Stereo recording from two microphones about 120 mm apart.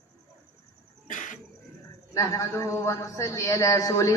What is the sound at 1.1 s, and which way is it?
Cough, 90° left.